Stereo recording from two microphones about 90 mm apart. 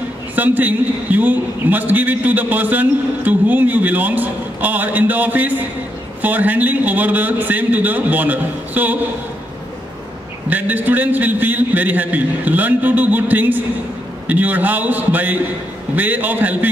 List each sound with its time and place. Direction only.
0.4 s a man's voice: 20° right (ahead or behind)
10.5 s a man's voice: 20° right (ahead or behind)